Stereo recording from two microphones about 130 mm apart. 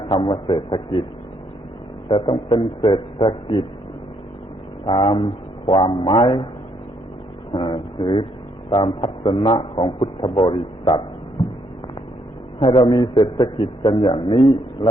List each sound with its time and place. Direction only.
0.0 s a man's voice: 40° left (ahead or behind)
2.0 s a man's voice: 40° left (ahead or behind)
4.9 s a man's voice: 40° left (ahead or behind)
7.5 s a man's voice: 40° left (ahead or behind)
12.5 s a man's voice: 40° left (ahead or behind)